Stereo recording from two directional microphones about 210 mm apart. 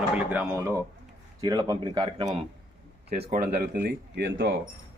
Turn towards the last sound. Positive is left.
turn(degrees=-60)  # may be behind; listen again after turning